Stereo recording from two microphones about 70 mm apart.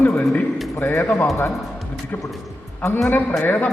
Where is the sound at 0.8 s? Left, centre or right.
Left.